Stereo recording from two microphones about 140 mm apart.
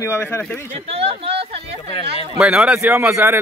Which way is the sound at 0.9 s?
45° right (ahead or behind).